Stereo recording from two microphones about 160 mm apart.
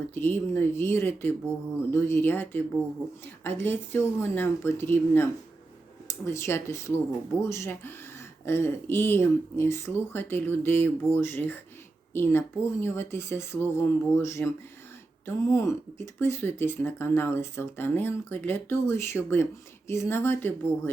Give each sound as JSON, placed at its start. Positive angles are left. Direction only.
{"t": 0.1, "sound": "speech", "side_deg": 15}